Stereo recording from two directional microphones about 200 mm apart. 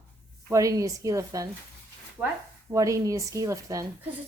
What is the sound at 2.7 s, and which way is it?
A woman's voice, 15° right (ahead or behind).